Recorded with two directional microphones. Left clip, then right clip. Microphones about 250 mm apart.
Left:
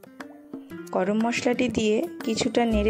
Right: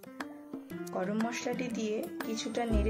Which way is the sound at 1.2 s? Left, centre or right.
Left.